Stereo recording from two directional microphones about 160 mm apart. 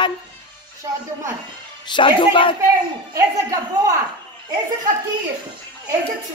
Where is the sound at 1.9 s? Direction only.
30° left (ahead or behind).